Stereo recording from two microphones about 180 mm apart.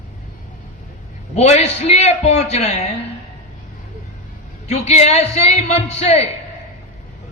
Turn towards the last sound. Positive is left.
turn(degrees=40)  # may be behind; listen again after turning